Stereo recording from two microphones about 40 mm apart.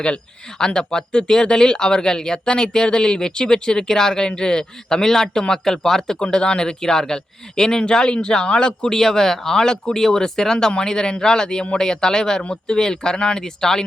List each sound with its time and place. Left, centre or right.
0.6 s speech: centre